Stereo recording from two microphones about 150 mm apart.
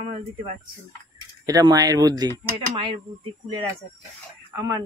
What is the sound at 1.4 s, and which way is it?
Speech, 25° right (ahead or behind).